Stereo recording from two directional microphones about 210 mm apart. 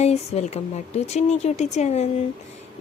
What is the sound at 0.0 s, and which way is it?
A woman's voice, 30° left (ahead or behind).